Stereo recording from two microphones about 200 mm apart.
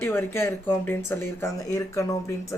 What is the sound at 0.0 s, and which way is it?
Speech, 10° left (ahead or behind).